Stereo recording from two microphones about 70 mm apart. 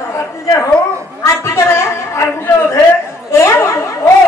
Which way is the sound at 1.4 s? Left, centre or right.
Left.